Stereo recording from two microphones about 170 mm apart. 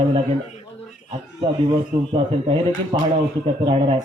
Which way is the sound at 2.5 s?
30° right (ahead or behind).